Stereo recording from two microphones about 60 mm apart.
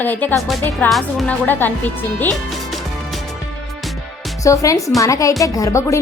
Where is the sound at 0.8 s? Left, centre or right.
Left.